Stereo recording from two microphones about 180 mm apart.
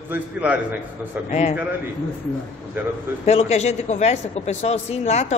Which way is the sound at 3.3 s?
35° left (ahead or behind).